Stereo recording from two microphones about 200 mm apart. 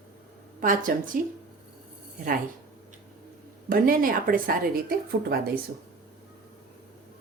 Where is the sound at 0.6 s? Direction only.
40° right (ahead or behind).